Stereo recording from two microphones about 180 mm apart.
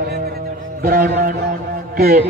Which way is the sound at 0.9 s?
55° right (ahead or behind).